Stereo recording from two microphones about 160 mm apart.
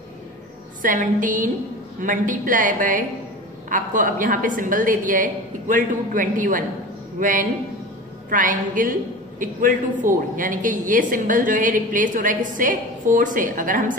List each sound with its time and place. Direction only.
0.8 s a woman's voice: 55° right (ahead or behind)